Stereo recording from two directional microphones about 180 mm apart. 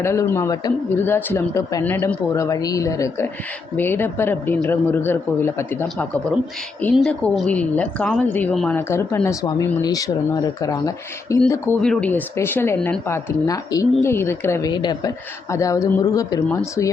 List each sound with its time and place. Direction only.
0.0 s a woman's voice: 15° left (ahead or behind)